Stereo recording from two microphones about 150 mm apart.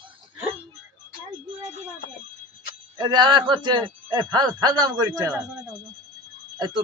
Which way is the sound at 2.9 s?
30° right (ahead or behind).